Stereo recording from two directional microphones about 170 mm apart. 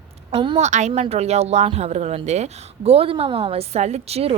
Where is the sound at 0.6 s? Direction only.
45° right (ahead or behind).